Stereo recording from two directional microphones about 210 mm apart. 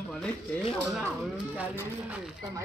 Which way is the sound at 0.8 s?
5° right (ahead or behind).